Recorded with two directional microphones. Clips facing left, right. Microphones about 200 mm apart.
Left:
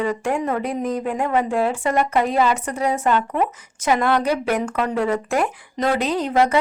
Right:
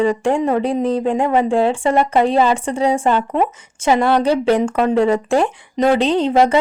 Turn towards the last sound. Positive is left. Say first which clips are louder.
# right 5 dB
turn(degrees=-30)  # may be behind; listen again after turning